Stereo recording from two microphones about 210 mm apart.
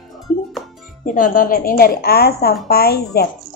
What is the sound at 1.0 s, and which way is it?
Speech, 40° left (ahead or behind).